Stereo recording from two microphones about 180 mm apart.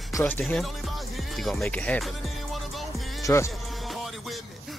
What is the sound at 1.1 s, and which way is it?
Music, centre (ahead or behind).